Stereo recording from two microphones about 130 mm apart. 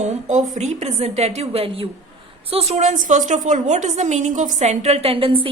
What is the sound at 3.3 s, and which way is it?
A woman's voice, 70° right (ahead or behind).